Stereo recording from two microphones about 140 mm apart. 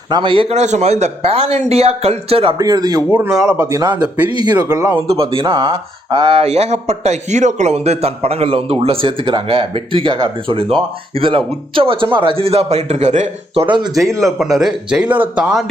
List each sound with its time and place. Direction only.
0.1 s speech: 35° right (ahead or behind)
2.6 s speech: 25° right (ahead or behind)
3.1 s speech: 10° right (ahead or behind)
4.5 s speech: 25° right (ahead or behind)
5.0 s speech: 40° right (ahead or behind)
14.2 s speech: centre (ahead or behind)